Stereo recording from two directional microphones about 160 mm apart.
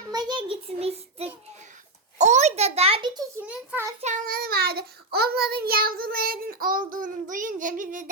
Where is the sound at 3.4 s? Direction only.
10° right (ahead or behind).